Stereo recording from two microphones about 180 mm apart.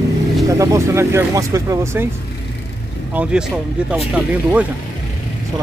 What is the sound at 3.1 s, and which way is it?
Speech, 5° right (ahead or behind).